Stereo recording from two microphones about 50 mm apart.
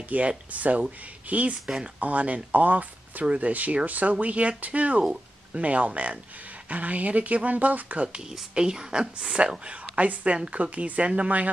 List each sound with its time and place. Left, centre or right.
0.1 s speech: right
5.0 s speech: centre
8.2 s speech: centre; by 11.5 s right